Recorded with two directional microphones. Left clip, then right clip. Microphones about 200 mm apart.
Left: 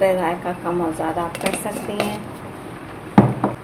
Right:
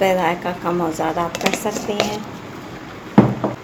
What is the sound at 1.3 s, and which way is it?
Speech, 15° right (ahead or behind).